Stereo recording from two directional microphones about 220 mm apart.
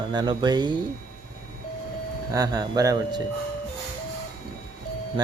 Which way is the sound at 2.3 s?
15° right (ahead or behind).